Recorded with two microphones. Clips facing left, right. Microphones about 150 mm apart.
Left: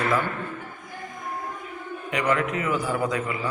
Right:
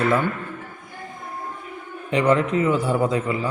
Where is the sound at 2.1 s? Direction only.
30° right (ahead or behind).